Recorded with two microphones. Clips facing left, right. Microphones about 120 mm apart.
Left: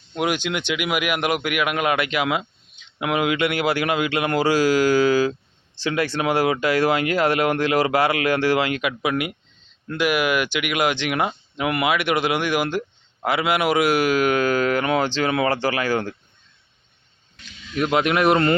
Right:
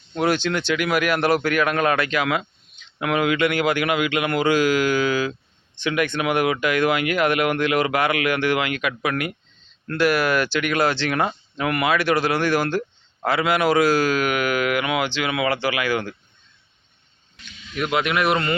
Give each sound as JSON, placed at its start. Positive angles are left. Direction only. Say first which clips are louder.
{"t": 0.1, "sound": "a man's voice", "louder": "right 2 dB", "side_deg": 10}
{"t": 17.9, "sound": "a man's voice", "louder": "left 3 dB", "side_deg": 40}